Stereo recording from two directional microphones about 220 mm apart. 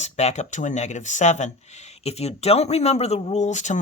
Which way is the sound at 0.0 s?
30° left (ahead or behind).